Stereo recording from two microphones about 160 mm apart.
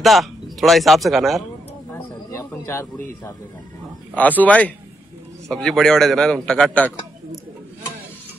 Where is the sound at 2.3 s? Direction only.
15° left (ahead or behind).